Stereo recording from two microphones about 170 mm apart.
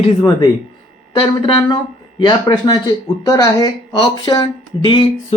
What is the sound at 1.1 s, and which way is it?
Speech, 30° left (ahead or behind).